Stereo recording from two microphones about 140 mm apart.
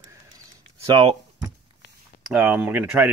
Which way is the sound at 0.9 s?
35° right (ahead or behind).